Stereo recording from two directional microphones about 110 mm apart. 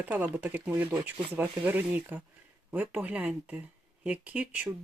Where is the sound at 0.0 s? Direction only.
15° right (ahead or behind).